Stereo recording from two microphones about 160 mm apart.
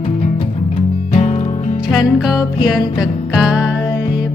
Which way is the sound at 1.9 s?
Centre (ahead or behind).